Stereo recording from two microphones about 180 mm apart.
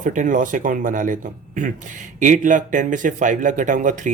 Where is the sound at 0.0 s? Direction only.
45° right (ahead or behind).